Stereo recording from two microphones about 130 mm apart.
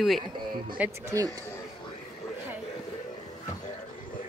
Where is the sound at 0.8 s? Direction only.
25° right (ahead or behind).